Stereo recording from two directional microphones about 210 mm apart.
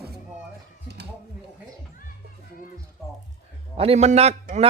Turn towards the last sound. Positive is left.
turn(degrees=-35)  # may be behind; listen again after turning